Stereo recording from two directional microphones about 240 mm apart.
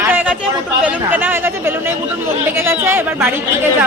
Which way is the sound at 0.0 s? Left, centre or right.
Centre.